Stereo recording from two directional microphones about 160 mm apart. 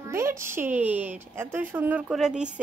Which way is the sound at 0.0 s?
20° right (ahead or behind).